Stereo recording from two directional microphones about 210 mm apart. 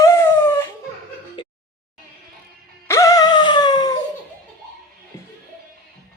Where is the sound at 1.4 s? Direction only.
25° left (ahead or behind).